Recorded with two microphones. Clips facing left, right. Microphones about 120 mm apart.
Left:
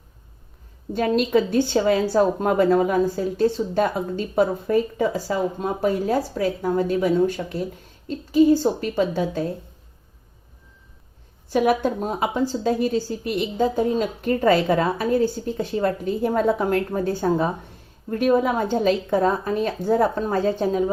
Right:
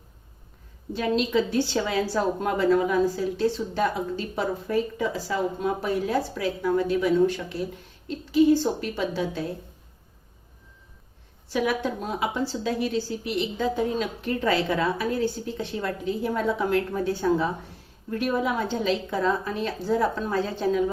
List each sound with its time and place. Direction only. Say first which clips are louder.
0.9 s speech: left 4 dB; 45° left (ahead or behind)
11.4 s speech: left 6 dB; 45° left (ahead or behind)